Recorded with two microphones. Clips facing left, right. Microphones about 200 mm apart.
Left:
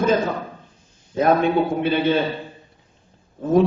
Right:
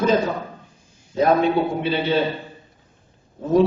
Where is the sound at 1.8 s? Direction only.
50° left (ahead or behind).